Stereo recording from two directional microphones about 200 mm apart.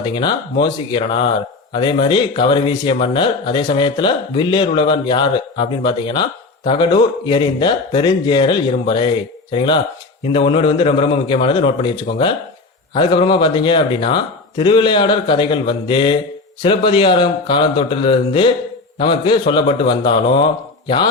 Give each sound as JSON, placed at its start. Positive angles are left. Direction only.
{"t": 0.0, "sound": "speech", "side_deg": 25}